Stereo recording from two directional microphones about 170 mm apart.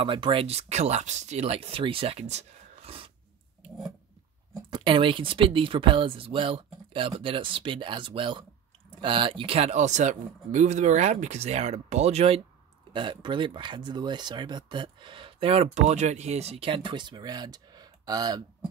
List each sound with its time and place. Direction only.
0.0 s speech: 30° right (ahead or behind)
4.6 s speech: 30° right (ahead or behind)
12.9 s speech: 30° right (ahead or behind)